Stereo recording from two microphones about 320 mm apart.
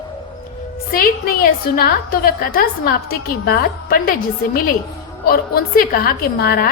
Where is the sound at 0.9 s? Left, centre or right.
Left.